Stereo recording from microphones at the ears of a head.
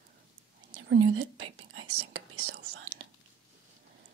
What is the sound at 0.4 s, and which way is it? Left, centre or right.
Whispering, right.